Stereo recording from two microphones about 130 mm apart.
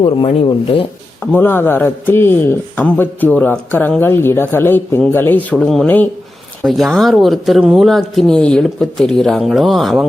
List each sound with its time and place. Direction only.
0.4 s speech: 45° left (ahead or behind)
1.2 s a man's voice: 15° left (ahead or behind)
5.5 s speech: 5° left (ahead or behind)